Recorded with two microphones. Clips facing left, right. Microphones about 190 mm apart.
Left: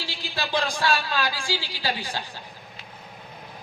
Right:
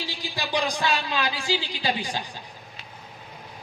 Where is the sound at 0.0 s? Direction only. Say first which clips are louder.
Even; 15° right (ahead or behind).